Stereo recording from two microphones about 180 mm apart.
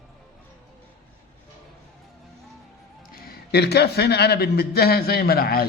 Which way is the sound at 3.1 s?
55° left (ahead or behind).